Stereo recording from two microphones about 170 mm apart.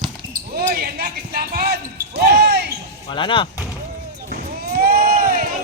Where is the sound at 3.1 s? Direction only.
30° left (ahead or behind).